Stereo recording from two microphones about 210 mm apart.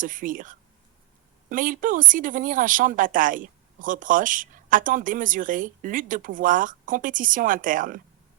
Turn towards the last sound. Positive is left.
turn(degrees=-40)  # may be behind; listen again after turning